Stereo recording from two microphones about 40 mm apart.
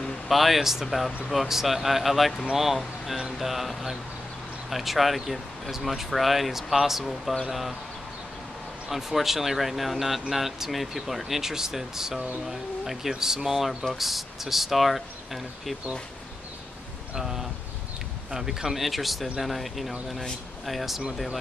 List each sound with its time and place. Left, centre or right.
0.3 s speech: centre
8.8 s speech: centre
13.5 s speech: centre
17.2 s speech: centre